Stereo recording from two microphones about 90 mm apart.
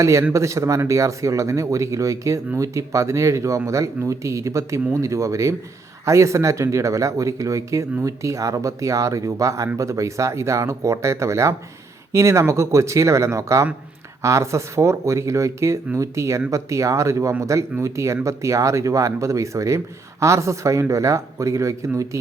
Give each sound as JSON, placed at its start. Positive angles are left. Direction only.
{"t": 0.0, "sound": "speech", "side_deg": -35}